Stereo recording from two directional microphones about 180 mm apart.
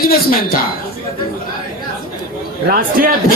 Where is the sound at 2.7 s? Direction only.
55° right (ahead or behind).